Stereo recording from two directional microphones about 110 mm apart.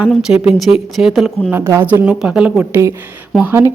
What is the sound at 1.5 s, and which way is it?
A woman's voice, 20° right (ahead or behind).